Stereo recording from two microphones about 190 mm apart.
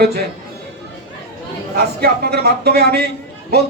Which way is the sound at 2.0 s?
55° right (ahead or behind).